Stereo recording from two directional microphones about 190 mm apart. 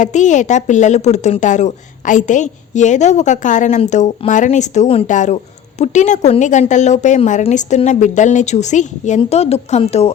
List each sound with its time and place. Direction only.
0.0 s a woman's voice: 40° left (ahead or behind)